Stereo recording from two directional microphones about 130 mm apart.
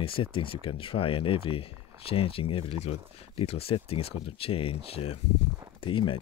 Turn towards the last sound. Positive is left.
turn(degrees=40)  # may be behind; listen again after turning